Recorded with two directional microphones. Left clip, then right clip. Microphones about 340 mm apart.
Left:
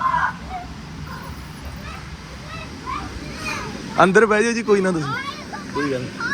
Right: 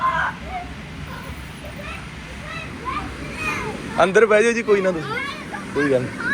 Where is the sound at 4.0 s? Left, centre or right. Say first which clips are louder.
Even; centre.